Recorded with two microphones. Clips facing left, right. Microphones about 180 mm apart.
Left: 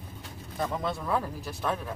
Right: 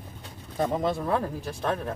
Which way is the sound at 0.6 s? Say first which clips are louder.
Right 5 dB; 30° right (ahead or behind).